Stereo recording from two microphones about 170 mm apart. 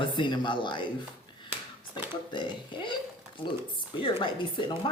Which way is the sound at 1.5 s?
10° right (ahead or behind).